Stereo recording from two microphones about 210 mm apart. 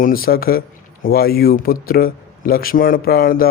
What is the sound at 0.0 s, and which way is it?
A man's voice, 45° left (ahead or behind).